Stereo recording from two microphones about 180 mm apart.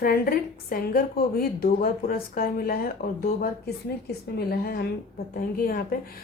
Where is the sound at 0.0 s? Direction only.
55° left (ahead or behind).